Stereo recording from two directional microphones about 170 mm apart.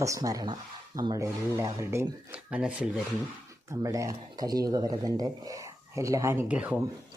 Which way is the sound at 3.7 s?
20° right (ahead or behind).